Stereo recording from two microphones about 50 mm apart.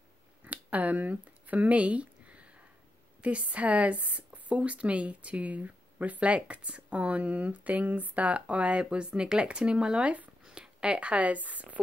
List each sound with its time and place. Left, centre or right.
0.5 s a sound: right
3.2 s speech: right
10.4 s speech: centre; by 11.8 s right